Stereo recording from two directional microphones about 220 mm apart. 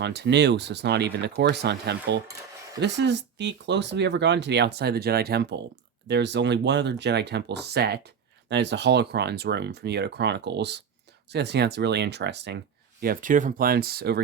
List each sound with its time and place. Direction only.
0.0 s speech: 50° right (ahead or behind)